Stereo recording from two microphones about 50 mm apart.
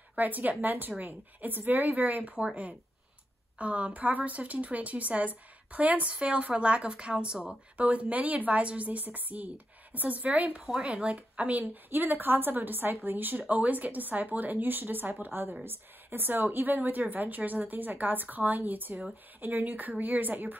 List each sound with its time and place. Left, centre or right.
0.1 s speech: right
3.5 s a woman's voice: right